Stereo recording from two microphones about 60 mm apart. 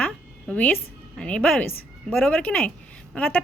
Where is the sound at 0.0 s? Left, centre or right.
Left.